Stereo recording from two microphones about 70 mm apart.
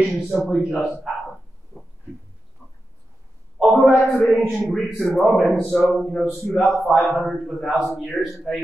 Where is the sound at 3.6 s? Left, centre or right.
Centre.